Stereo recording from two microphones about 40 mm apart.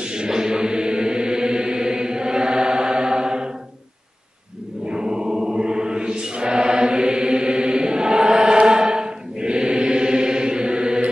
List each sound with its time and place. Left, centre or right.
0.0 s chant: centre
4.8 s chant: centre